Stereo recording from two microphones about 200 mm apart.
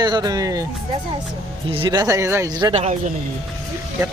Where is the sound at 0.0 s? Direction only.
20° right (ahead or behind).